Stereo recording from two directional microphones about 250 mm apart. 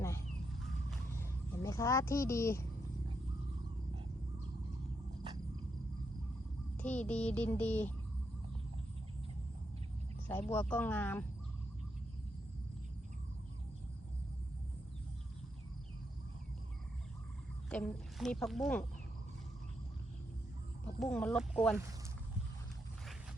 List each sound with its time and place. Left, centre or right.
1.1 s a sound: centre
5.2 s cricket: centre
6.7 s a sound: centre
7.1 s speech: centre
10.2 s speech: centre
17.7 s speech: centre
21.0 s speech: centre